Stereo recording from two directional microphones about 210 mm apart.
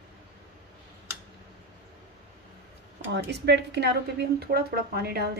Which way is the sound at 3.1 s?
55° right (ahead or behind).